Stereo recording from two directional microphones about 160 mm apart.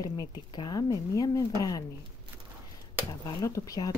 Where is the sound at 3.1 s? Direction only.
20° left (ahead or behind).